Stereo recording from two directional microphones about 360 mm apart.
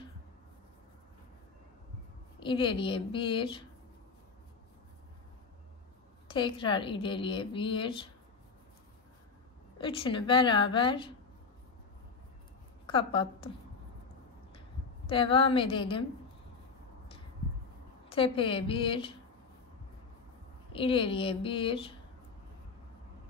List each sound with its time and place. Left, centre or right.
2.4 s a woman's voice: centre
6.2 s a woman's voice: centre
9.8 s a woman's voice: centre
12.8 s a woman's voice: centre
15.0 s a woman's voice: centre
18.1 s a woman's voice: centre
20.7 s a woman's voice: centre